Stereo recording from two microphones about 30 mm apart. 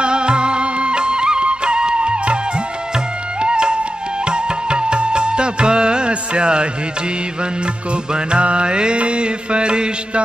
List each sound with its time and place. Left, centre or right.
0.0 s music: right
3.3 s music: right
8.1 s mantra: right